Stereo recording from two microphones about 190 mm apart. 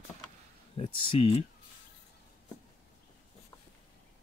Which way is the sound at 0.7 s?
25° left (ahead or behind).